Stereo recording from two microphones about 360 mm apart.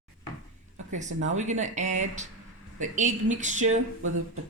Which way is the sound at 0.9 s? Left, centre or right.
Centre.